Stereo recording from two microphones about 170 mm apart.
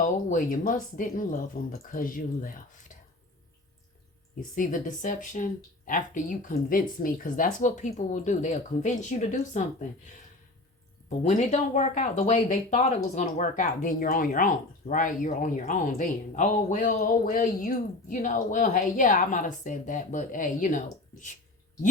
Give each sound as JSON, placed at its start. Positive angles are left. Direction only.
{"t": 0.0, "sound": "speech", "side_deg": 50}
{"t": 4.4, "sound": "speech", "side_deg": 50}
{"t": 11.2, "sound": "speech", "side_deg": 40}